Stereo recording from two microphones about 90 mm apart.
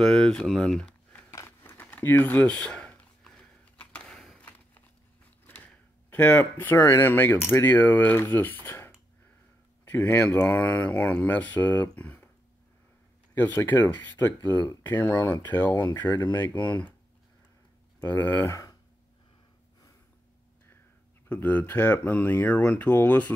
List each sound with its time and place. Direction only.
0.0 s speech: 10° left (ahead or behind)
1.3 s a sound: 30° left (ahead or behind); by 4.4 s 5° left (ahead or behind)
4.4 s a sound: 15° left (ahead or behind)
5.5 s speech: 20° left (ahead or behind)
8.6 s a sound: 25° left (ahead or behind)
10.0 s speech: 15° left (ahead or behind)
13.3 s speech: 25° left (ahead or behind)
14.5 s speech: 50° left (ahead or behind)
14.8 s speech: 20° left (ahead or behind)
16.2 s speech: 55° left (ahead or behind)
16.4 s speech: 20° left (ahead or behind)
18.1 s speech: 25° left (ahead or behind)
21.3 s speech: 20° left (ahead or behind)